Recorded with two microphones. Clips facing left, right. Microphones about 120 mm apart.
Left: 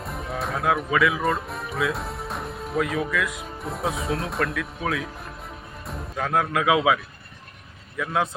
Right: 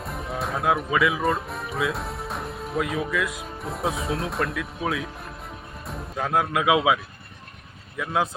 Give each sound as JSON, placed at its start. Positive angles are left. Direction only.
{"t": 0.0, "sound": "music", "side_deg": 0}
{"t": 0.9, "sound": "speech", "side_deg": -25}
{"t": 1.2, "sound": "music", "side_deg": 0}
{"t": 3.0, "sound": "speech", "side_deg": -25}
{"t": 3.4, "sound": "speech", "side_deg": 0}
{"t": 4.8, "sound": "speech", "side_deg": -25}
{"t": 5.8, "sound": "speech", "side_deg": 0}
{"t": 6.2, "sound": "speech", "side_deg": -20}